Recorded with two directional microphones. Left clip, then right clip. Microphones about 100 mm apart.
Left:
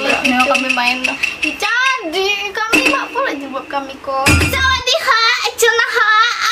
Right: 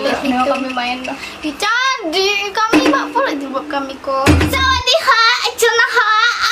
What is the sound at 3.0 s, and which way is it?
Speech, 15° right (ahead or behind).